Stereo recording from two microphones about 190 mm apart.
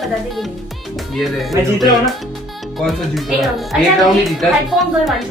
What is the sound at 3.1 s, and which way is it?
A child's voice, centre (ahead or behind).